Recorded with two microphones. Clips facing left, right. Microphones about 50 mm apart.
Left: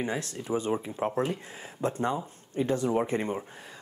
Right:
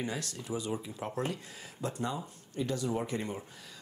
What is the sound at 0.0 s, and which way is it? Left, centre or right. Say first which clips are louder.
A man's voice: left 5 dB; left.